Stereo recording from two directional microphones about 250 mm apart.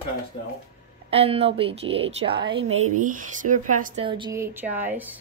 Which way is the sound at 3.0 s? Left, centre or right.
Right.